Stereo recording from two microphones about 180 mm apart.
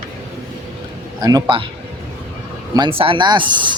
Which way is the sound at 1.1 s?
20° right (ahead or behind).